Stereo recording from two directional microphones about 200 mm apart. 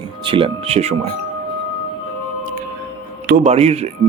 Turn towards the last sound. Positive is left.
turn(degrees=-30)  # may be behind; listen again after turning